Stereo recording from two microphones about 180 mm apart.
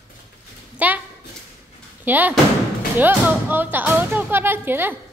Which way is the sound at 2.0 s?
10° right (ahead or behind).